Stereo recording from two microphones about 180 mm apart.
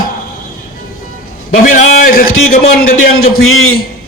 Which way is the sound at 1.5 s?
50° left (ahead or behind).